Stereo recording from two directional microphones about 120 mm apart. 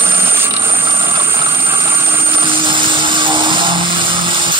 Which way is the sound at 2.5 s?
45° right (ahead or behind).